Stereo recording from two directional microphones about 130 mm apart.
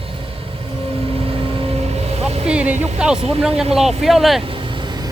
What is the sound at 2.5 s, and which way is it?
Speech, 10° right (ahead or behind).